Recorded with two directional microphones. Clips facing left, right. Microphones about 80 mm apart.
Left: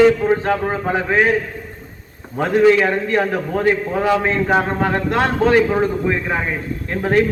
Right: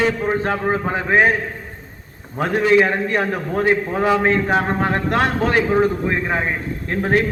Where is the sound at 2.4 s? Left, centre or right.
Centre.